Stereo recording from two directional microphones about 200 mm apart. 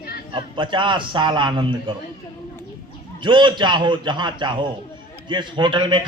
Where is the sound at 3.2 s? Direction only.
25° right (ahead or behind).